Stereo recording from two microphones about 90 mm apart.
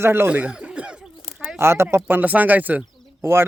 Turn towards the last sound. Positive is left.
turn(degrees=-25)  # may be behind; listen again after turning